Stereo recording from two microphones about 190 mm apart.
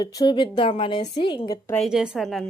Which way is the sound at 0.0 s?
20° left (ahead or behind).